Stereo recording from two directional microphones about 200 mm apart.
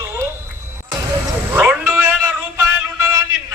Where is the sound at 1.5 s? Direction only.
5° right (ahead or behind).